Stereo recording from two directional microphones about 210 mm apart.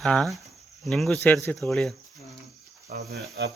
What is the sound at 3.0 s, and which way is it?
Speech, 50° right (ahead or behind).